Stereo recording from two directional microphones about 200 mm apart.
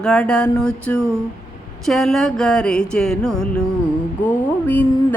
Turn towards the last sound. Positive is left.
turn(degrees=10)  # may be behind; listen again after turning